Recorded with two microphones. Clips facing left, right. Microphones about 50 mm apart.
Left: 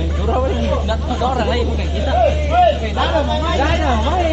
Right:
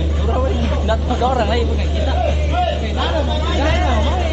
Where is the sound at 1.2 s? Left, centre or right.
Centre.